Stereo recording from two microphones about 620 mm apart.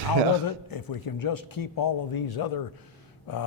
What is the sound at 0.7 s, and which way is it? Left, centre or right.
A man's voice, left.